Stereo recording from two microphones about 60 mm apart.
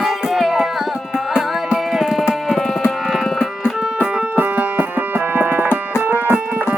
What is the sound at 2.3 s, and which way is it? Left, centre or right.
Tabla, centre.